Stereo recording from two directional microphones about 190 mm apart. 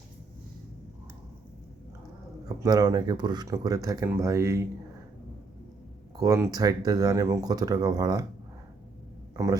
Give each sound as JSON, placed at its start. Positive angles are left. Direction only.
{"t": 2.6, "sound": "speech", "side_deg": -20}
{"t": 6.1, "sound": "speech", "side_deg": -15}
{"t": 9.3, "sound": "a man's voice", "side_deg": -15}